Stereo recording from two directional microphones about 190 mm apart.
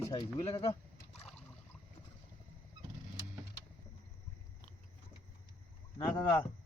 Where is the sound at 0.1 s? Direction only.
20° left (ahead or behind).